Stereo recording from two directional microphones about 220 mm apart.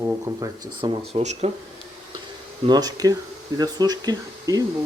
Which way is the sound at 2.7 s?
15° right (ahead or behind).